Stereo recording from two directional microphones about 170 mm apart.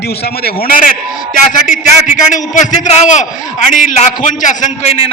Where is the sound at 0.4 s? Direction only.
55° left (ahead or behind).